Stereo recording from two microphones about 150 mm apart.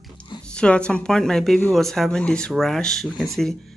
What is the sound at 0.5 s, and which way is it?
Speech, 5° left (ahead or behind).